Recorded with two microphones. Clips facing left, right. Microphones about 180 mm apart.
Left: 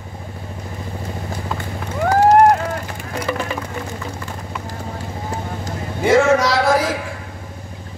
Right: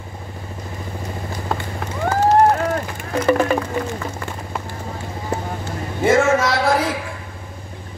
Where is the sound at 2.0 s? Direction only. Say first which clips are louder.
Left 3 dB; 40° left (ahead or behind).